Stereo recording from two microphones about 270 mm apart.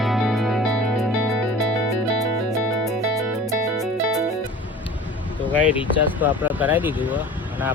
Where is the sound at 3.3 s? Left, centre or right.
Centre.